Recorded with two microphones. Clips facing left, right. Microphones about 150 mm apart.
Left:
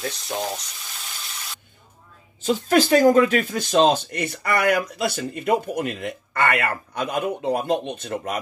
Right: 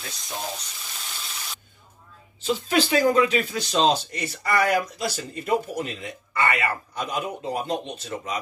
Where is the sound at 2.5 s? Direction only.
45° left (ahead or behind).